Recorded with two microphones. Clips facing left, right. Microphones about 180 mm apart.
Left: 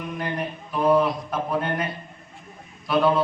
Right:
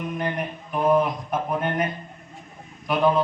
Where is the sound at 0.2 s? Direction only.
20° right (ahead or behind).